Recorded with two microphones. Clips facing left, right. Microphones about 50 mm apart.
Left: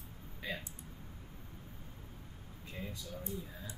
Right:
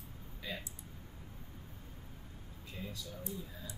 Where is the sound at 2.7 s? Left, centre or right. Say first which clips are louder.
Left 1 dB; left.